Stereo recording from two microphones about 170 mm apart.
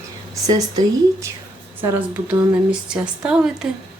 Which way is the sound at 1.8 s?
10° right (ahead or behind).